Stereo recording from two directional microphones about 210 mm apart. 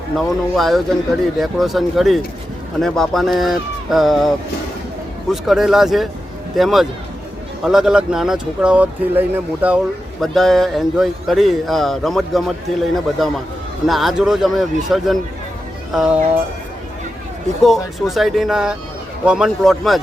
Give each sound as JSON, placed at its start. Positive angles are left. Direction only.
{"t": 0.2, "sound": "a man's voice", "side_deg": 0}
{"t": 17.6, "sound": "a man's voice", "side_deg": 0}